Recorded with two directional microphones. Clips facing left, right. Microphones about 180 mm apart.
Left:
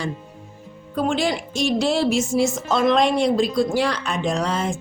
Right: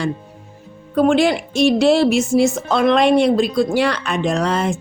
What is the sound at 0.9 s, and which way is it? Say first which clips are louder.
Speech: right 7 dB; 65° right (ahead or behind).